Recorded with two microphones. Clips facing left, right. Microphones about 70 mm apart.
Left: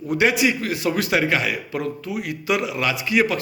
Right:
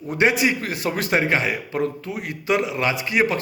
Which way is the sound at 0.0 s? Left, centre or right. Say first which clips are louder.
Even; right.